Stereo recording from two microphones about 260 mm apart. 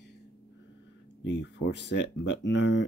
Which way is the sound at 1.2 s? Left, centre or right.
Left.